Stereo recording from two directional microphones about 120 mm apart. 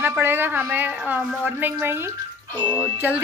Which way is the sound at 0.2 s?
15° right (ahead or behind).